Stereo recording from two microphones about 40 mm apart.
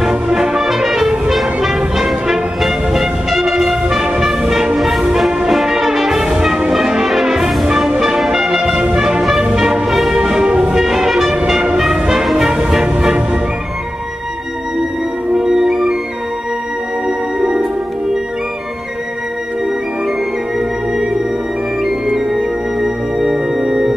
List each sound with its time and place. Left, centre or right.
0.1 s music: centre
4.7 s music: centre
5.5 s brass instrument: centre
6.4 s music: centre
7.1 s brass instrument: centre
7.8 s music: centre
9.8 s music: centre
10.2 s music: centre
12.5 s music: right
15.3 s music: centre
20.5 s music: centre
21.8 s organ: centre